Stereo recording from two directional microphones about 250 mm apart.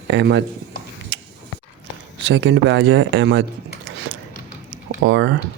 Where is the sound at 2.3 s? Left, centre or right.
Right.